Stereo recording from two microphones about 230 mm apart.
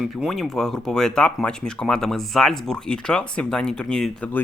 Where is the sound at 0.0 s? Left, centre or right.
Centre.